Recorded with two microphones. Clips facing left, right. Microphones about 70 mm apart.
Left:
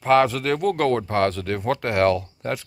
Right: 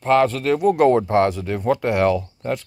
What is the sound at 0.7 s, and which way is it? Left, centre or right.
Speech, centre.